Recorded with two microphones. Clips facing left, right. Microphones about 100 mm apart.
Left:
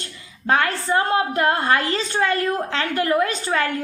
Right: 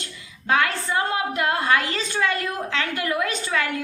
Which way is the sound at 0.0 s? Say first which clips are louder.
Left 5 dB; 35° left (ahead or behind).